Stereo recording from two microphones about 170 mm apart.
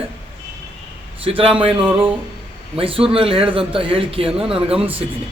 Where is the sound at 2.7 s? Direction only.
30° right (ahead or behind).